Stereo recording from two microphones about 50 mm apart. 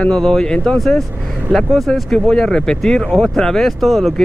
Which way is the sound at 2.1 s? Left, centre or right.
Centre.